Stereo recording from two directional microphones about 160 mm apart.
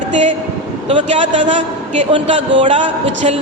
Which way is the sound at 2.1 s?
35° right (ahead or behind).